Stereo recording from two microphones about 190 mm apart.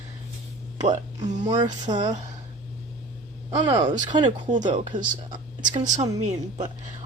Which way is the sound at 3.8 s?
40° right (ahead or behind).